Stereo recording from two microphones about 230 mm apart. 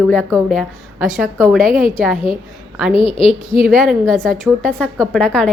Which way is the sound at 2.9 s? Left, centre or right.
Left.